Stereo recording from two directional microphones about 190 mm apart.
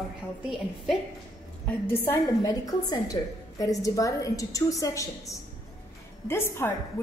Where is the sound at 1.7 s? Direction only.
15° left (ahead or behind).